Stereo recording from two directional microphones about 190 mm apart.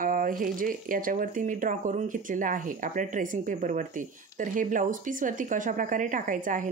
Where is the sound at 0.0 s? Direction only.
45° right (ahead or behind).